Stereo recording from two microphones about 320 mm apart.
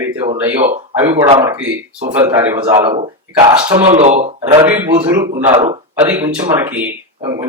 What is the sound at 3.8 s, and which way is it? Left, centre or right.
Speech, centre.